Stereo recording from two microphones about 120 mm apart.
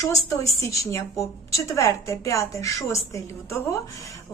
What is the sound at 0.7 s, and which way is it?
A woman's voice, 25° left (ahead or behind).